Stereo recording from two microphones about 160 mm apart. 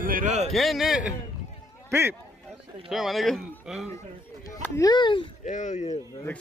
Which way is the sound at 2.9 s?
Centre (ahead or behind).